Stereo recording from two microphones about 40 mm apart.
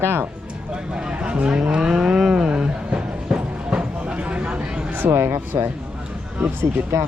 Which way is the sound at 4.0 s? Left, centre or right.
Right.